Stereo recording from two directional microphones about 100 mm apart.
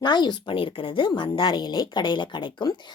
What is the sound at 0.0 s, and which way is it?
Speech, 45° left (ahead or behind).